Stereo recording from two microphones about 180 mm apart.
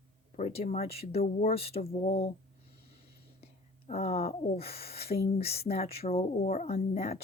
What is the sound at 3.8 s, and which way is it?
Speech, 35° left (ahead or behind).